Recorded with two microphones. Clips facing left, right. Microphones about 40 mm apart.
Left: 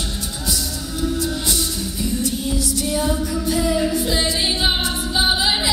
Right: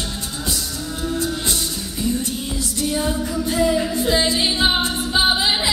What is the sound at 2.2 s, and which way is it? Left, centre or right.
Music, right.